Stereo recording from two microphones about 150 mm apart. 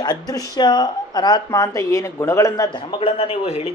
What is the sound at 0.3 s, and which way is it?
A woman's voice, 25° left (ahead or behind).